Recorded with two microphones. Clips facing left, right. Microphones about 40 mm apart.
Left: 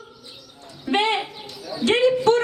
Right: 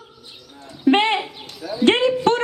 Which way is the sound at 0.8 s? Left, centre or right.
Right.